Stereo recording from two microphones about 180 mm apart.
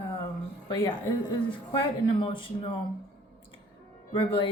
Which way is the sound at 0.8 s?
25° left (ahead or behind).